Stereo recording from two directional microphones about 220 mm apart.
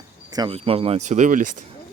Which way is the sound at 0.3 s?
20° right (ahead or behind).